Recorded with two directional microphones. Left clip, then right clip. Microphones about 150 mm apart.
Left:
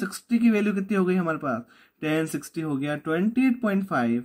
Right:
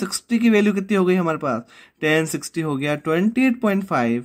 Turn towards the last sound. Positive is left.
turn(degrees=-40)  # may be behind; listen again after turning